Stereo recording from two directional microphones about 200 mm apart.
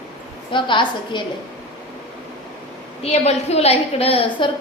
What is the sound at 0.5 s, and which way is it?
Speech, 25° left (ahead or behind).